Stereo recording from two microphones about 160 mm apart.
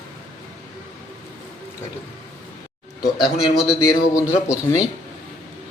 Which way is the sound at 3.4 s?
5° right (ahead or behind).